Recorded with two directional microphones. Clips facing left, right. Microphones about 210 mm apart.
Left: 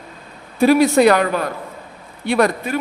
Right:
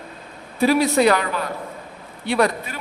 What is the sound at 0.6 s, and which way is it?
A man's voice, 50° left (ahead or behind).